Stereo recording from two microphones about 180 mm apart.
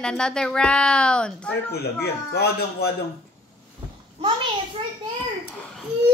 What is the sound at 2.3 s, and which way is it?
Speech, 60° left (ahead or behind).